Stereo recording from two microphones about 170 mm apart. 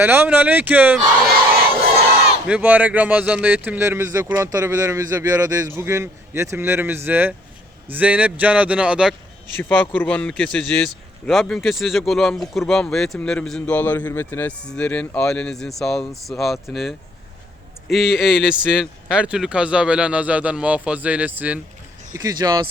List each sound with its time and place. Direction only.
0.0 s speech: 10° right (ahead or behind)
2.5 s speech: 10° right (ahead or behind)
9.6 s a man's voice: 10° left (ahead or behind); by 21.6 s 10° right (ahead or behind)
22.1 s speech: 25° right (ahead or behind)